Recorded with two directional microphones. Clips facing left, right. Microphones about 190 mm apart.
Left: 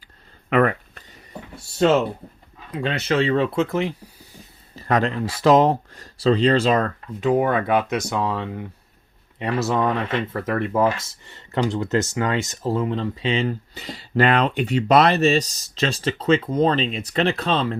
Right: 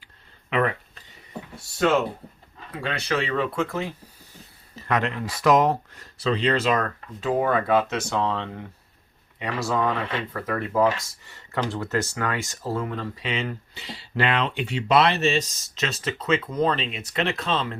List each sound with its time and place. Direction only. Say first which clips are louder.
0.5 s a sound: left 5 dB; 50° left (ahead or behind)
2.7 s speech: left 5 dB; 20° left (ahead or behind)
4.7 s speech: left 4 dB; 35° left (ahead or behind)
7.2 s speech: left 3 dB; 20° left (ahead or behind)
9.4 s speech: left 4 dB; 25° left (ahead or behind)
13.8 s speech: left 6 dB; 45° left (ahead or behind)